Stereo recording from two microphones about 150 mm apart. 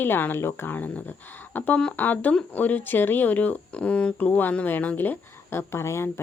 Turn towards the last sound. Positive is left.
turn(degrees=20)  # may be behind; listen again after turning